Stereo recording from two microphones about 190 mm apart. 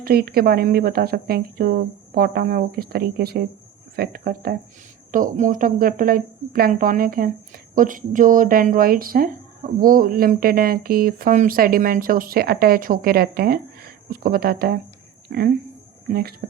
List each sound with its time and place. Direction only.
0.0 s speech: 50° right (ahead or behind)